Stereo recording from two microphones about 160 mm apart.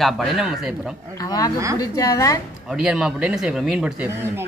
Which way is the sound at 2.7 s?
5° right (ahead or behind).